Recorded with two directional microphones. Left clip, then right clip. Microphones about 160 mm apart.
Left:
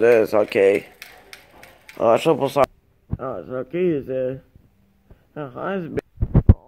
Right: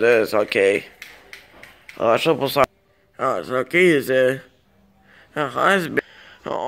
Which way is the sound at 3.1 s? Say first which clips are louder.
Right 7 dB; 15° right (ahead or behind).